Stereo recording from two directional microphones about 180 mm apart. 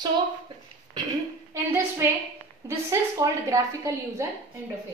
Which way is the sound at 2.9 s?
15° right (ahead or behind).